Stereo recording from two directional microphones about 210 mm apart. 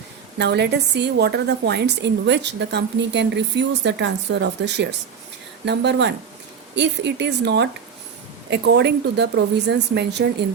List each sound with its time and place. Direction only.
0.3 s a woman's voice: 55° right (ahead or behind)